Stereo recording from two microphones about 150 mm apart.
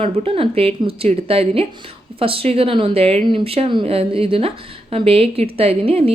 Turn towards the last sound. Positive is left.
turn(degrees=-40)  # may be behind; listen again after turning